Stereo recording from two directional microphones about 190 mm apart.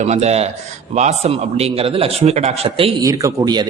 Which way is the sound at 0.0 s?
35° right (ahead or behind).